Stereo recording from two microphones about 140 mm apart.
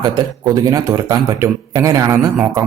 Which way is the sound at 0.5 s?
25° right (ahead or behind).